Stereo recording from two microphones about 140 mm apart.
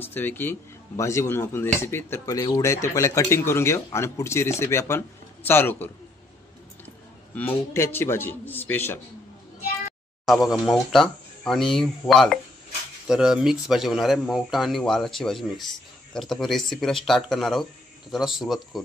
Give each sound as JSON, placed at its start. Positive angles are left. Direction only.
{"t": 0.0, "sound": "speech", "side_deg": 15}
{"t": 7.3, "sound": "a man's voice", "side_deg": 15}
{"t": 10.2, "sound": "speech", "side_deg": 0}